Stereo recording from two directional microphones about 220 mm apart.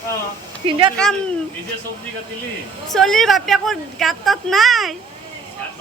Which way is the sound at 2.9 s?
Centre (ahead or behind).